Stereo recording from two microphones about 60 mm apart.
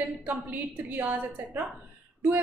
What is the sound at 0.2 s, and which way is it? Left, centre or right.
A woman's voice, right.